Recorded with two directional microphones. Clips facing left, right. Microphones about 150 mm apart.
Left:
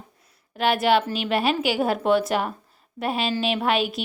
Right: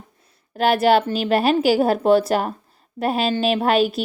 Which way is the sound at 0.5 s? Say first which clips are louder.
Right 4 dB; 40° right (ahead or behind).